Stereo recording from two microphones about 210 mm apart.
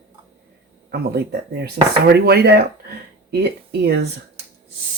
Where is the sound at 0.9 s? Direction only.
50° right (ahead or behind).